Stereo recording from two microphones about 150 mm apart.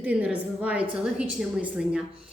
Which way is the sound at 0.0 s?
10° right (ahead or behind).